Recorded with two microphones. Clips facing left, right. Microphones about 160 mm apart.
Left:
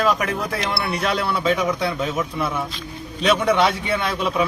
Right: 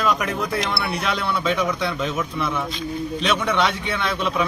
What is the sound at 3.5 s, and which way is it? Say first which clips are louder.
Speech: left 3 dB; 10° left (ahead or behind).